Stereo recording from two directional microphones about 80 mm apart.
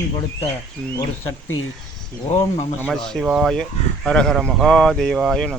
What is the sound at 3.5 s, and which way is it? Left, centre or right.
Speech, centre.